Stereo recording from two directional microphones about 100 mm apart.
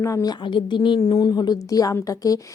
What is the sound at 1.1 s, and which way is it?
A woman's voice, 40° left (ahead or behind).